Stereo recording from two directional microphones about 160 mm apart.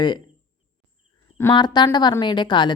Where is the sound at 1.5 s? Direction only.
30° left (ahead or behind).